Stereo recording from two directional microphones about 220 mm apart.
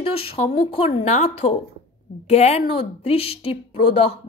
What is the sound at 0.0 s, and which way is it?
A woman's voice, 25° left (ahead or behind).